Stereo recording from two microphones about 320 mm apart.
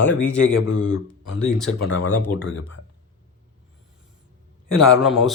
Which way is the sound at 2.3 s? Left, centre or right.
Left.